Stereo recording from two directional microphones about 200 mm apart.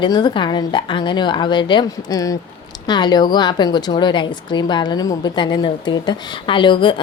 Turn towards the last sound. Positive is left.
turn(degrees=25)  # may be behind; listen again after turning